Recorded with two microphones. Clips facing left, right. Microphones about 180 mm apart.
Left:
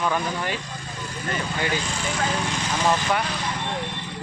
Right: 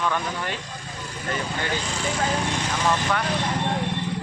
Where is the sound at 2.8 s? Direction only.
15° left (ahead or behind).